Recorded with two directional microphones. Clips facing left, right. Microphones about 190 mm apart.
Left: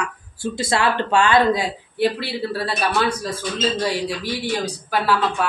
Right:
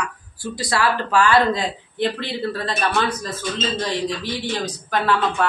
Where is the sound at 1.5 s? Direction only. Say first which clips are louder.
Left 2 dB; 10° left (ahead or behind).